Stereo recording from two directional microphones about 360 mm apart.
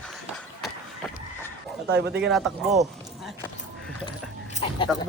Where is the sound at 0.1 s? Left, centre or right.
Centre.